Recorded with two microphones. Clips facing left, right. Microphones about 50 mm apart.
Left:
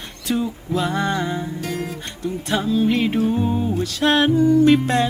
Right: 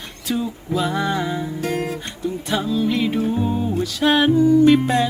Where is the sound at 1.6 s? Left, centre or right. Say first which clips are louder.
Right 3 dB; right.